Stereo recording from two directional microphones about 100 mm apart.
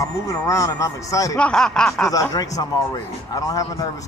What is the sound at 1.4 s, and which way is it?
Snicker, 5° left (ahead or behind).